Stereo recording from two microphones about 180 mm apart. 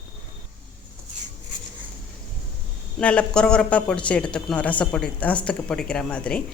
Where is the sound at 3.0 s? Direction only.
5° left (ahead or behind).